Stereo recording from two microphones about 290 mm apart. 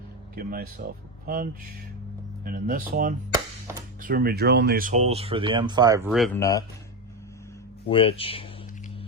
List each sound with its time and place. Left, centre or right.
0.3 s speech: right; by 6.1 s centre
6.1 s speech: centre
6.4 s speech: centre
7.9 s speech: centre